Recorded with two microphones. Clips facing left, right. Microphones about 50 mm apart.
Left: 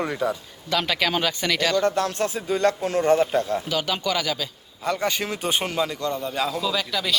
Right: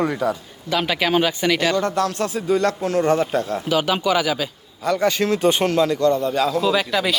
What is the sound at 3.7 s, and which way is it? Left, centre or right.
Speech, centre.